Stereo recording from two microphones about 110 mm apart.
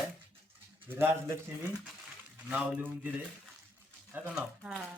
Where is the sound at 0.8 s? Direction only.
20° right (ahead or behind).